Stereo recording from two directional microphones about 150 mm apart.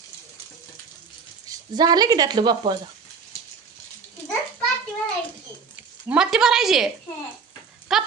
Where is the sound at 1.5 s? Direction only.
25° right (ahead or behind).